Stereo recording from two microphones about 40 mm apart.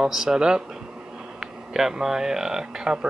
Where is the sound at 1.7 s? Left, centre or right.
Centre.